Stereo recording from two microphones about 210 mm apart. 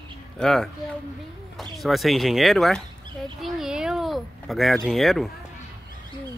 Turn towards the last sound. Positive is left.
turn(degrees=0)  # may be behind; listen again after turning